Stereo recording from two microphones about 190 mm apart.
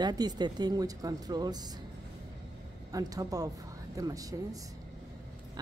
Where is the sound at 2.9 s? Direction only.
20° right (ahead or behind).